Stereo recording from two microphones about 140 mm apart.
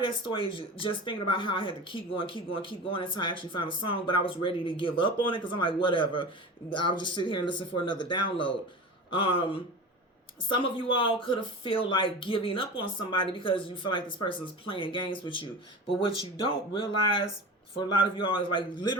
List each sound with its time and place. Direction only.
0.0 s speech: 40° left (ahead or behind)
10.5 s speech: 40° left (ahead or behind)